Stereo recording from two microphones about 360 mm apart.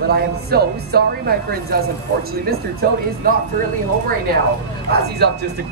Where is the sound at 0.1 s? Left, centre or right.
Right.